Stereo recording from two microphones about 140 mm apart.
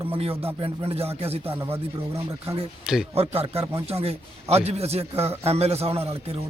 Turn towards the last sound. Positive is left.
turn(degrees=-45)  # may be behind; listen again after turning